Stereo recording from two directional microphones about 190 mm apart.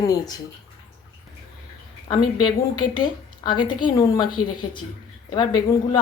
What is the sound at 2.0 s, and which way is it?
A woman's voice, 20° left (ahead or behind).